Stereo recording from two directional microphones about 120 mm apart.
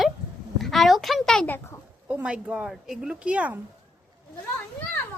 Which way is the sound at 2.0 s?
10° right (ahead or behind).